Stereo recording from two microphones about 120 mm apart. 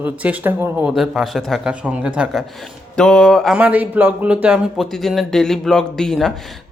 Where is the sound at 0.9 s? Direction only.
Centre (ahead or behind).